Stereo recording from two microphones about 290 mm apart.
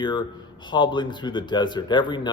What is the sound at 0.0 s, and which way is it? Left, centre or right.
Speech, centre.